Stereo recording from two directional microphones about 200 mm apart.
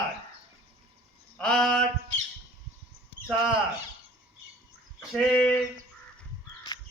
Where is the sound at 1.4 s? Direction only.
5° left (ahead or behind).